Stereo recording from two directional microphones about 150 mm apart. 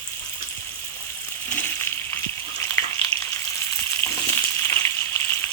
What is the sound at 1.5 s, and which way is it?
Frying, 15° left (ahead or behind).